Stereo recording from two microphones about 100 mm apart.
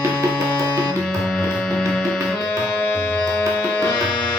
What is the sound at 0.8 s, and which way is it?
Music, 10° left (ahead or behind).